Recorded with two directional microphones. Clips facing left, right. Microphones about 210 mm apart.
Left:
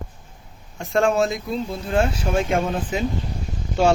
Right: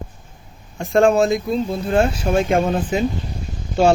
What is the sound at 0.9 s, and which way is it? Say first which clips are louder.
Speech: right 5 dB; 45° right (ahead or behind).